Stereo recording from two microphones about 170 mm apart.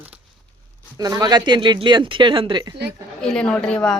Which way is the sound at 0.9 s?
20° right (ahead or behind).